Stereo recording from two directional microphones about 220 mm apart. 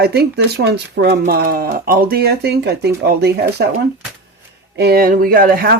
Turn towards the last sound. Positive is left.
turn(degrees=-40)  # may be behind; listen again after turning